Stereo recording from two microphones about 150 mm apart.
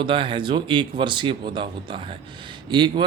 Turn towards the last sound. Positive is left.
turn(degrees=-30)  # may be behind; listen again after turning